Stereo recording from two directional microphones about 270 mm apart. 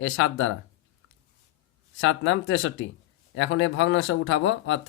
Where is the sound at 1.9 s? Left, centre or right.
Left.